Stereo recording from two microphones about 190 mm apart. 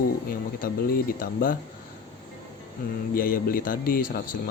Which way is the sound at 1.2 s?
50° left (ahead or behind).